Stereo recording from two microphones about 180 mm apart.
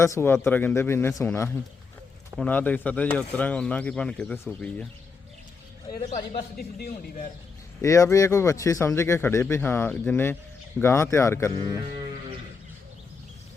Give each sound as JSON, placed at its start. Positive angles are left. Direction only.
{"t": 0.0, "sound": "speech", "side_deg": 15}
{"t": 6.6, "sound": "a man's voice", "side_deg": 60}
{"t": 7.8, "sound": "speech", "side_deg": 15}